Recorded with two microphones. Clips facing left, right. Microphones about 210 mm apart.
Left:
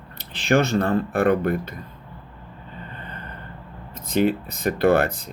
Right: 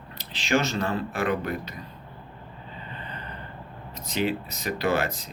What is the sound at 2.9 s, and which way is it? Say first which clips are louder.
Gasp: left 1 dB; 50° left (ahead or behind).